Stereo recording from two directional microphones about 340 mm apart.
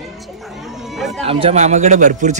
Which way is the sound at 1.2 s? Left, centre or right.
Centre.